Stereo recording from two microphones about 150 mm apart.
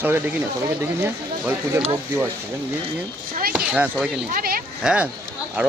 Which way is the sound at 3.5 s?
10° right (ahead or behind).